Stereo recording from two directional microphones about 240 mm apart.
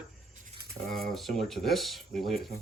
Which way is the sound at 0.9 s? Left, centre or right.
Centre.